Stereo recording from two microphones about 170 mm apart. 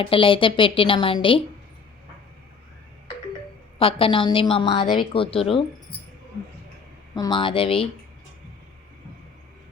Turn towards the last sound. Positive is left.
turn(degrees=35)  # may be behind; listen again after turning